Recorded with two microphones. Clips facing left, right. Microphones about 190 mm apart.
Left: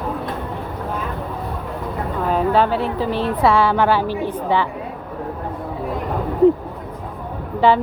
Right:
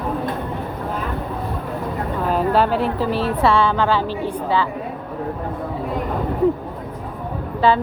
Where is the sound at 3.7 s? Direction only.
15° left (ahead or behind).